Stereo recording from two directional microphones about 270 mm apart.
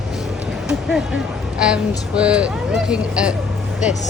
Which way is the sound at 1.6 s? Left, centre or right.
Centre.